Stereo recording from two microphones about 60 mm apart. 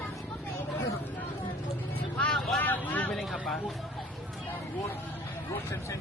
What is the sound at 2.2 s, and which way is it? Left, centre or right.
Vehicle, left.